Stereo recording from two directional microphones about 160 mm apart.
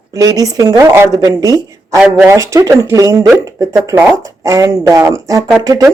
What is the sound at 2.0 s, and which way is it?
Speech, 10° right (ahead or behind).